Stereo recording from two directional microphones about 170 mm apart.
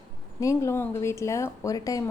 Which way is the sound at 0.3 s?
20° left (ahead or behind).